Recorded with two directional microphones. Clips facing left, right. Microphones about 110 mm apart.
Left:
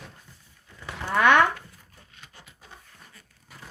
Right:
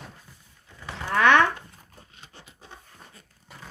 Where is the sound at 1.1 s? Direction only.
10° left (ahead or behind).